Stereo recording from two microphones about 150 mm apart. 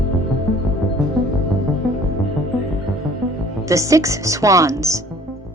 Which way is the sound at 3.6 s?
20° right (ahead or behind).